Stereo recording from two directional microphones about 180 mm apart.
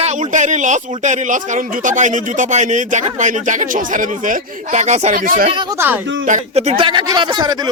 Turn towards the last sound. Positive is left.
turn(degrees=-25)  # may be behind; listen again after turning